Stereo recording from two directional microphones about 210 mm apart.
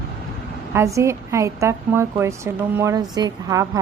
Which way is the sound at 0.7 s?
15° right (ahead or behind).